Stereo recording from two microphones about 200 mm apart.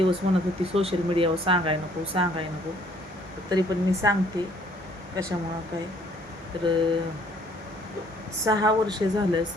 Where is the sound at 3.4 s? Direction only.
20° right (ahead or behind).